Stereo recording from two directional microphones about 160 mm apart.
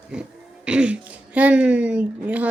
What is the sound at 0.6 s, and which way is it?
Speech, 5° right (ahead or behind).